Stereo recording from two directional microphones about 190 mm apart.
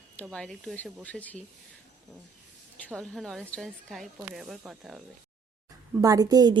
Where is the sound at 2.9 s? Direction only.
5° left (ahead or behind).